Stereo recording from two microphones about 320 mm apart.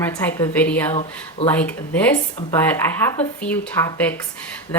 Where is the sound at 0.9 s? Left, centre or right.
Centre.